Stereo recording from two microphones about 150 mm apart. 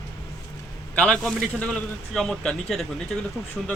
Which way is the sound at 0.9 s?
5° left (ahead or behind).